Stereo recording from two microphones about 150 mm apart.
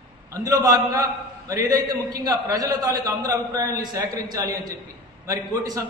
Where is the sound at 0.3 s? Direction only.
25° right (ahead or behind).